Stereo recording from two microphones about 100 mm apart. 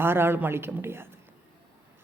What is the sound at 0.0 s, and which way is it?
A man's voice, 25° right (ahead or behind).